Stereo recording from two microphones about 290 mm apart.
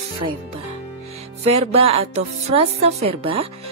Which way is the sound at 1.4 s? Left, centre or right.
Right.